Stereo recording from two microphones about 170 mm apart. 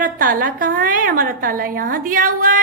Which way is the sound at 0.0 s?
55° right (ahead or behind).